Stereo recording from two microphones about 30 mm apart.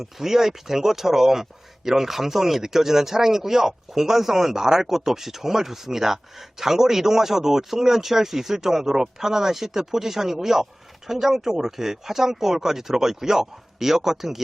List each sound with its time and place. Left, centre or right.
0.0 s speech: centre